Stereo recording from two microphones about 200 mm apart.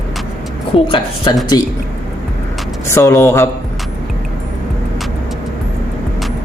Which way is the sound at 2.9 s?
15° left (ahead or behind).